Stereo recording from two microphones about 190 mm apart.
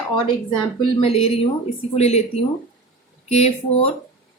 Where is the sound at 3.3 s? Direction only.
35° left (ahead or behind).